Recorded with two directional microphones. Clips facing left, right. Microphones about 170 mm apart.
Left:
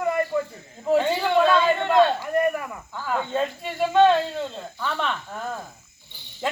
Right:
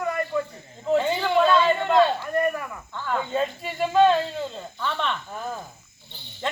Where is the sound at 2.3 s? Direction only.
20° left (ahead or behind).